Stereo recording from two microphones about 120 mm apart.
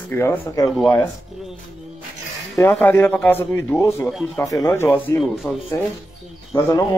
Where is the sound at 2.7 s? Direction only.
20° left (ahead or behind).